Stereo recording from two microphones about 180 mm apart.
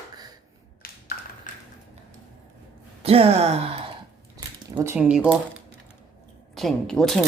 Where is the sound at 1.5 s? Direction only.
45° left (ahead or behind).